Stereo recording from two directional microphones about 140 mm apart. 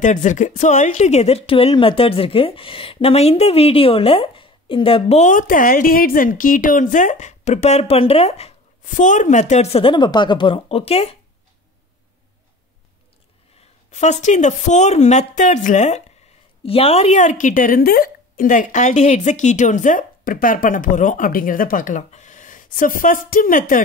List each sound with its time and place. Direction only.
0.0 s speech: 60° left (ahead or behind)
5.3 s a woman's voice: 70° left (ahead or behind); by 11.1 s 45° left (ahead or behind)
13.8 s a sound: 55° left (ahead or behind)
14.2 s a woman's voice: 60° left (ahead or behind)
16.6 s a woman's voice: 45° left (ahead or behind); by 23.8 s 80° left